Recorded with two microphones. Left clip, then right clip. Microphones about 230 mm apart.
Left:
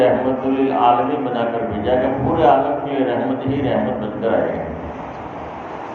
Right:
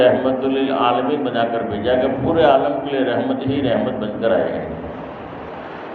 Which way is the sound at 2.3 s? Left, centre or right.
Right.